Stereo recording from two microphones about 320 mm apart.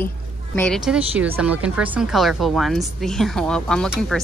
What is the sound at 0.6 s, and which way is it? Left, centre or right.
Speech, centre.